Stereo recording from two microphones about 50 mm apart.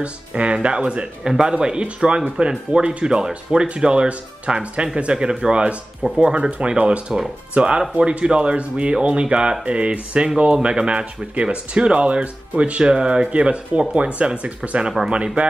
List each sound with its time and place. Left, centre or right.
0.0 s speech: right